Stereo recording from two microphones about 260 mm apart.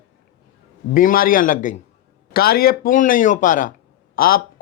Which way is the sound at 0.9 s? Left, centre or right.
Left.